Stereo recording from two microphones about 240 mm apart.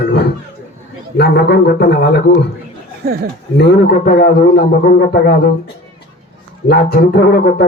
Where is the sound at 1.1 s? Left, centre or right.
Left.